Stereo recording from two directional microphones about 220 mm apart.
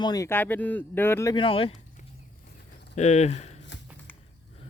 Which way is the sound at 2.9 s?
30° left (ahead or behind).